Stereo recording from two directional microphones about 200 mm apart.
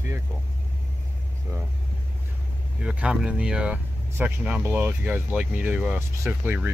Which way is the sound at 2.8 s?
5° right (ahead or behind).